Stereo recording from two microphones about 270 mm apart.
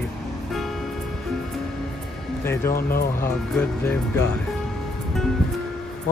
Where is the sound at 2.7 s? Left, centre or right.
Left.